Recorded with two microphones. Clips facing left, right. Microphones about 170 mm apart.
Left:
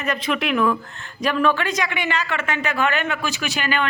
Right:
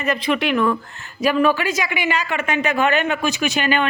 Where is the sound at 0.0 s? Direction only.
Centre (ahead or behind).